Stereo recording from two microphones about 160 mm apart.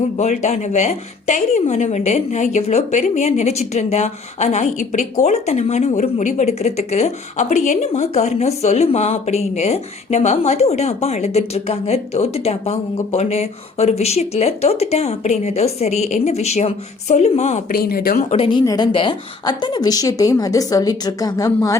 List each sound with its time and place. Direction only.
0.2 s a woman's voice: 45° left (ahead or behind)
17.7 s speech: 70° left (ahead or behind)
18.3 s speech: 35° left (ahead or behind)
18.6 s a woman's voice: 20° left (ahead or behind)
18.9 s a woman's voice: 30° left (ahead or behind)